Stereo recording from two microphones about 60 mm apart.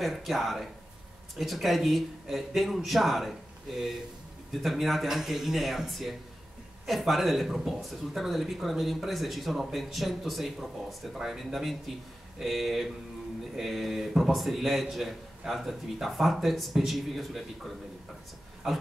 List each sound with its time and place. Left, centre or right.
0.0 s a man's voice: centre
4.6 s a man's voice: centre